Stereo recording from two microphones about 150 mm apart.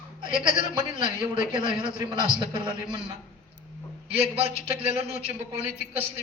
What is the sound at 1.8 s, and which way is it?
A man's voice, 35° right (ahead or behind).